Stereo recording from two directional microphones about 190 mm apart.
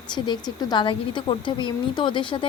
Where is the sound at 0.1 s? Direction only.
20° left (ahead or behind).